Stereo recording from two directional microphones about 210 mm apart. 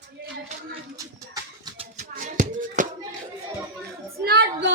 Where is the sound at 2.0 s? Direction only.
35° right (ahead or behind).